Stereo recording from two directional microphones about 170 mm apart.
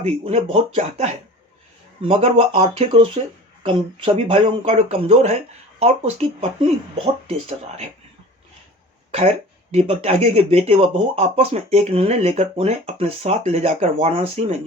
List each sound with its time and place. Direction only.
0.0 s speech: 40° right (ahead or behind)
9.7 s speech: 35° right (ahead or behind)